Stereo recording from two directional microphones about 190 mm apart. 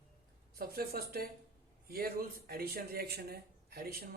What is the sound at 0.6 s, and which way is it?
Speech, 55° right (ahead or behind).